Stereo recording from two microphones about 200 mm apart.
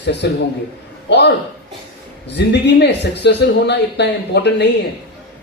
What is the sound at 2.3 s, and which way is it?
A man's voice, 60° left (ahead or behind).